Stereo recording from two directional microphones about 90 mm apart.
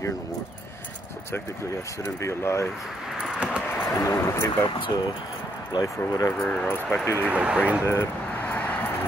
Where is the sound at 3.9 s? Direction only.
30° left (ahead or behind).